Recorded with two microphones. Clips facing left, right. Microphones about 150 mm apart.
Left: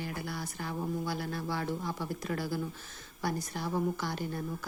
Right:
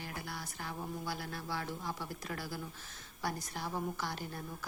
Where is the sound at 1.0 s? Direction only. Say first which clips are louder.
Left 5 dB; 5° right (ahead or behind).